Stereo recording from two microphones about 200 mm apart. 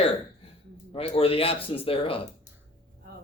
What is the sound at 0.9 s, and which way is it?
Speech, 30° left (ahead or behind).